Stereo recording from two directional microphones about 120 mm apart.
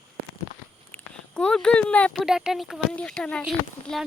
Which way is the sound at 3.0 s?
10° left (ahead or behind).